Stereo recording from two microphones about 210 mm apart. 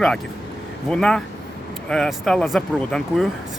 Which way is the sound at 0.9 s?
5° left (ahead or behind).